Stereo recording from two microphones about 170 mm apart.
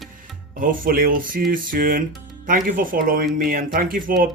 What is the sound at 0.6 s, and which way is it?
Speech, 55° right (ahead or behind).